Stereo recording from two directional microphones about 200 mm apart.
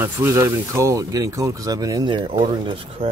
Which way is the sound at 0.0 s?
10° right (ahead or behind).